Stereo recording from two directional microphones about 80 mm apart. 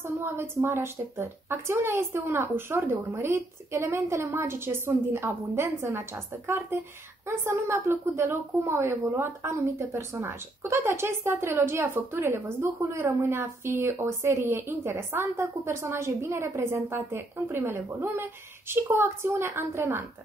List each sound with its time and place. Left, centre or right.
0.0 s a woman's voice: right